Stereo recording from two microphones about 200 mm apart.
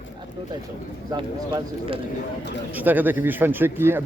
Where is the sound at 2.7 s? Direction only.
10° right (ahead or behind).